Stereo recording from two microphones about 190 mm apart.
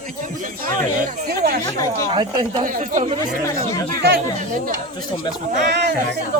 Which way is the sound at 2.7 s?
45° right (ahead or behind).